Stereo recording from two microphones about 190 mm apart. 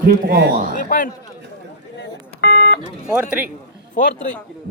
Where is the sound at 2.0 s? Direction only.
65° left (ahead or behind).